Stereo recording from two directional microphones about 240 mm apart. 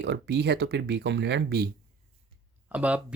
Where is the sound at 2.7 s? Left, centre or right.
Centre.